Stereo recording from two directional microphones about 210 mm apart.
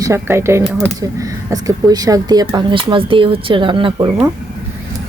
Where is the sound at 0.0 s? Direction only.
15° right (ahead or behind).